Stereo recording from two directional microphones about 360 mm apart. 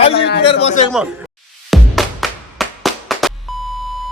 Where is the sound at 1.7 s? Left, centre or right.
Centre.